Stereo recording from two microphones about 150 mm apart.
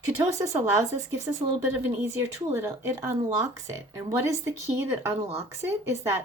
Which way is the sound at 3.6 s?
20° right (ahead or behind).